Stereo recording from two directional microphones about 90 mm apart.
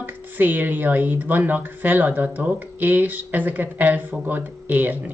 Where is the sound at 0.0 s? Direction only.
20° right (ahead or behind).